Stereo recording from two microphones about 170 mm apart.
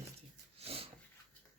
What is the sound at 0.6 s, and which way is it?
Dog, 35° right (ahead or behind).